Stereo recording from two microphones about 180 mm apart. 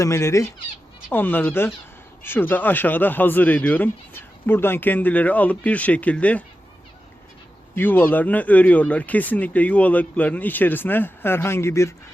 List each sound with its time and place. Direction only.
0.0 s speech: 15° left (ahead or behind)
7.8 s speech: 10° left (ahead or behind)